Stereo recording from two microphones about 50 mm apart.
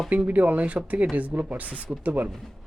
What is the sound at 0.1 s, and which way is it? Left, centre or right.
Speech, right.